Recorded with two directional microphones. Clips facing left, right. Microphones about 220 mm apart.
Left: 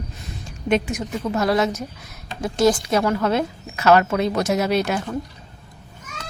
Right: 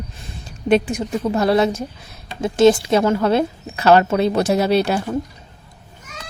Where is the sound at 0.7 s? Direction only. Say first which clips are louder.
Right 4 dB; 35° right (ahead or behind).